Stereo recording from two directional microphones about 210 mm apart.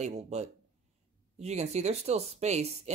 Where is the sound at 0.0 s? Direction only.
30° right (ahead or behind).